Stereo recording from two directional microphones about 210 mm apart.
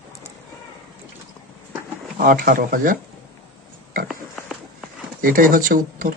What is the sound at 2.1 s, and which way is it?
Speech, 40° right (ahead or behind).